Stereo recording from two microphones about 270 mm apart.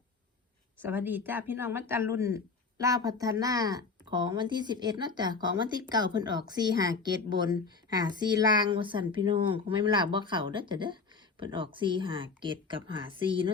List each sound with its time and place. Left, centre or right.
0.8 s speech: centre